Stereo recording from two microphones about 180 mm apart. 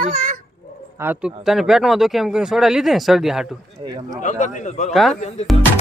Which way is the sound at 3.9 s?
20° right (ahead or behind).